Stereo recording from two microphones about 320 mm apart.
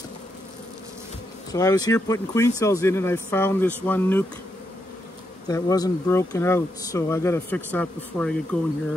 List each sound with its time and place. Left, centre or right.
1.5 s speech: centre
5.5 s speech: centre